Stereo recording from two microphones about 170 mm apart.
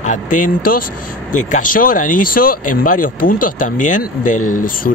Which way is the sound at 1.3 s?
45° left (ahead or behind).